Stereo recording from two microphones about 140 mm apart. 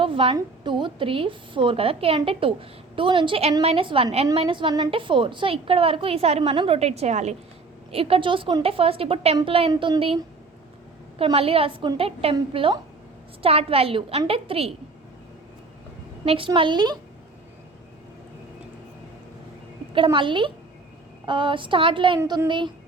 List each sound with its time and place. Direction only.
0.0 s a sound: 40° right (ahead or behind)
0.3 s a woman's voice: 35° right (ahead or behind)
11.2 s a woman's voice: 40° right (ahead or behind)
16.2 s a woman's voice: 40° right (ahead or behind)
16.6 s a woman's voice: 30° right (ahead or behind)
20.1 s a woman's voice: 35° right (ahead or behind)